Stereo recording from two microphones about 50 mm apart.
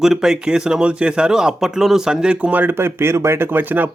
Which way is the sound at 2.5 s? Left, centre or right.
Right.